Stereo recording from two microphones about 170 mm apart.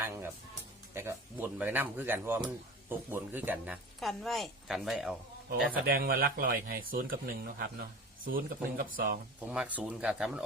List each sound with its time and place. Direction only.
0.0 s music: 15° right (ahead or behind)
0.9 s speech: 15° right (ahead or behind)
4.0 s a woman's voice: centre (ahead or behind)
5.5 s speech: 60° right (ahead or behind)
9.5 s speech: 5° right (ahead or behind)